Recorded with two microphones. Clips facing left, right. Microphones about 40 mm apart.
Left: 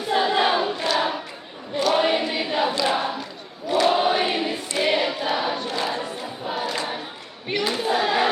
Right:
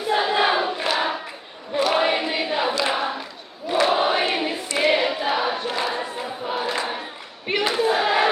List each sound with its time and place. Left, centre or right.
0.1 s choir: centre
3.7 s crowd: centre
4.4 s choir: centre
7.4 s crowd: centre